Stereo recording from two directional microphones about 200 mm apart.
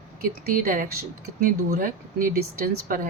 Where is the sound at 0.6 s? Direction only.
45° right (ahead or behind).